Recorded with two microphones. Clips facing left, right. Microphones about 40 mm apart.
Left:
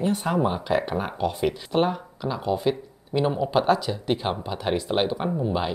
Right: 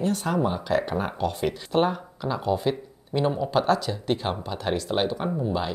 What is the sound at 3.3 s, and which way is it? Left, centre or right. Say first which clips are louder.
Speech: left 1 dB; centre.